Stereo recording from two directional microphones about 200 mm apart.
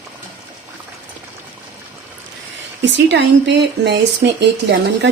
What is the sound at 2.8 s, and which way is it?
Speech, 60° right (ahead or behind).